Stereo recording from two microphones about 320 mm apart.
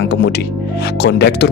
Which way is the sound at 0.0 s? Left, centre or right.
Left.